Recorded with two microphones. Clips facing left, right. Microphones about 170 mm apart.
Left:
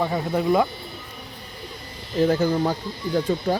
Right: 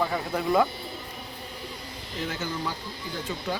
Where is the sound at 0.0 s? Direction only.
15° left (ahead or behind).